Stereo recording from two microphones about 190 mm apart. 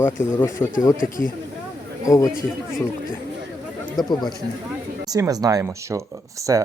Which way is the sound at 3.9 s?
25° left (ahead or behind).